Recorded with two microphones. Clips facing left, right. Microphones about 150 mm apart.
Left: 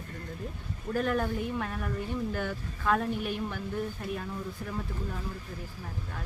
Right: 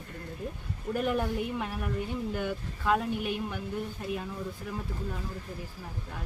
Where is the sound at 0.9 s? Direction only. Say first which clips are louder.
Even; 15° right (ahead or behind).